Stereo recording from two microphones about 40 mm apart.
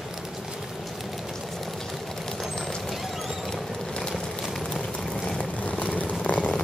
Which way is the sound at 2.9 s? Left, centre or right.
Centre.